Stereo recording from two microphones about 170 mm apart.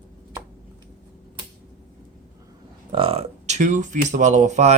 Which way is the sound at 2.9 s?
35° right (ahead or behind).